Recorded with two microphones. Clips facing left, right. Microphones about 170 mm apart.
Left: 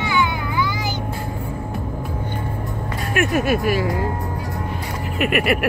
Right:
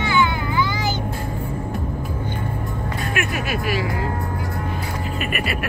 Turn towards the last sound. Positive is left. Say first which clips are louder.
# left 7 dB
turn(degrees=75)  # may be behind; listen again after turning